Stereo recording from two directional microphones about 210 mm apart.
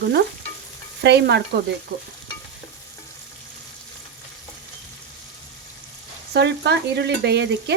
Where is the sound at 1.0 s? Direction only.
50° right (ahead or behind).